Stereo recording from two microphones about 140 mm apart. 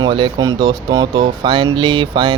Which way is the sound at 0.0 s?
35° right (ahead or behind).